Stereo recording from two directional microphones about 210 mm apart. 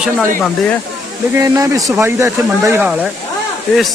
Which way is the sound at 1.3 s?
15° right (ahead or behind).